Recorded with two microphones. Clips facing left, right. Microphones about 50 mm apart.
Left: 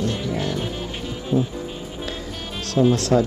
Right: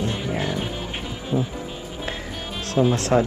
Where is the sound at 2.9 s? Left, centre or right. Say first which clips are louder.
Left 1 dB; right.